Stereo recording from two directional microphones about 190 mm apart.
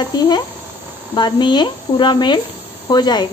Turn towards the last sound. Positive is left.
turn(degrees=20)  # may be behind; listen again after turning